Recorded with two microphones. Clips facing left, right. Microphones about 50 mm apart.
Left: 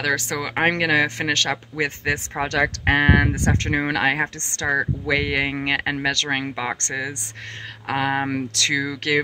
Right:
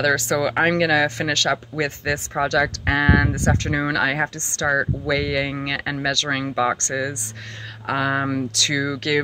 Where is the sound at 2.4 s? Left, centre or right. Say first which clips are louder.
Right 1 dB; left.